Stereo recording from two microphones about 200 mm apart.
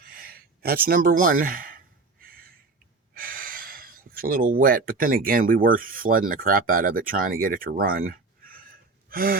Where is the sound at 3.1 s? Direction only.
45° right (ahead or behind).